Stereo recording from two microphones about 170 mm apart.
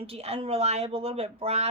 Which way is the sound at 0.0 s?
35° right (ahead or behind).